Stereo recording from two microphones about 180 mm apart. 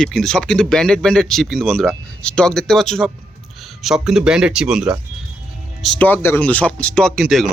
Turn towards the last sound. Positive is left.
turn(degrees=0)  # may be behind; listen again after turning